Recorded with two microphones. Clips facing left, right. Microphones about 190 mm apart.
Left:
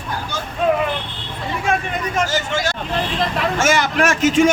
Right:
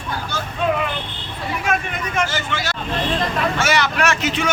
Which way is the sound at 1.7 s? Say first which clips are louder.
Left 3 dB; 40° left (ahead or behind).